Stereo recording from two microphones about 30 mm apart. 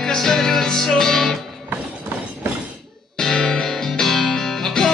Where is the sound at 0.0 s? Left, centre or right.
Centre.